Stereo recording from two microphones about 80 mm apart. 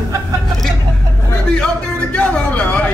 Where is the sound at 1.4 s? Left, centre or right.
Centre.